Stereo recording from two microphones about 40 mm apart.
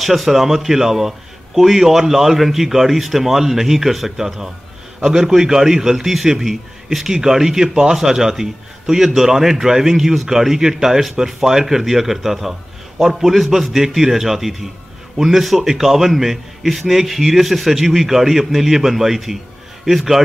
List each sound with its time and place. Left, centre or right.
0.0 s a man's voice: centre